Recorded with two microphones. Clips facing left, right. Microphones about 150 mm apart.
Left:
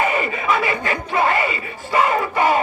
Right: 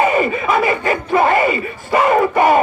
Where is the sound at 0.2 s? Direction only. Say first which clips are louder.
Right 5 dB; 45° right (ahead or behind).